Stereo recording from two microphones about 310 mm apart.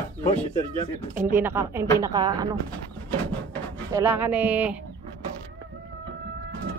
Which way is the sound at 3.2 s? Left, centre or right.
Centre.